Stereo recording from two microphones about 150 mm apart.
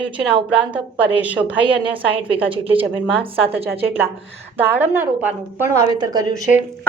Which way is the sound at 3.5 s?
15° right (ahead or behind).